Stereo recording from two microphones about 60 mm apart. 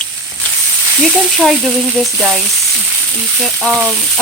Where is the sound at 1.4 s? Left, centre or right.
Centre.